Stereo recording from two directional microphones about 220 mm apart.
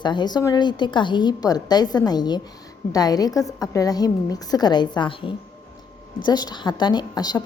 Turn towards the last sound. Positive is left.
turn(degrees=20)  # may be behind; listen again after turning